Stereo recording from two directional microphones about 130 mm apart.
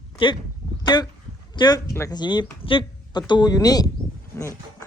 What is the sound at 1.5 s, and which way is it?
Speech, 30° left (ahead or behind).